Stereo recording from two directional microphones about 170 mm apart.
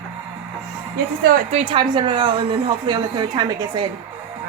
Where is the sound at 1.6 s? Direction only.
30° right (ahead or behind).